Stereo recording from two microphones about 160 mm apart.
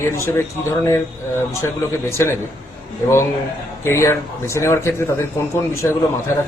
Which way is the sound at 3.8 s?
15° left (ahead or behind).